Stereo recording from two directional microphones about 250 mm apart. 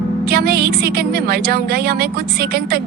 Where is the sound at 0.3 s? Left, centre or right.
Right.